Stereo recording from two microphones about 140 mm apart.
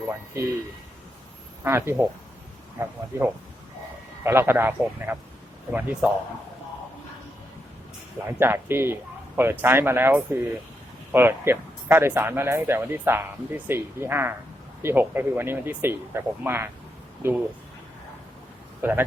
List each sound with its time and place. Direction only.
1.6 s speech: 15° right (ahead or behind)
8.3 s speech: 15° right (ahead or behind)
18.8 s speech: 15° right (ahead or behind)